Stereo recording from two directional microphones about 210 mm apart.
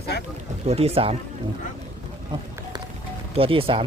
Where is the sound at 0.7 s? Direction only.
30° right (ahead or behind).